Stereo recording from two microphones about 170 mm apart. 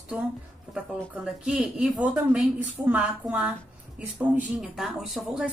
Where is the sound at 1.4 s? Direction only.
5° right (ahead or behind).